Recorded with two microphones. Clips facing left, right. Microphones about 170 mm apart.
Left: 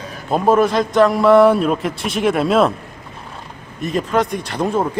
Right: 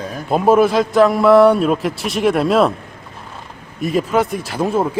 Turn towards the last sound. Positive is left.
turn(degrees=-5)  # may be behind; listen again after turning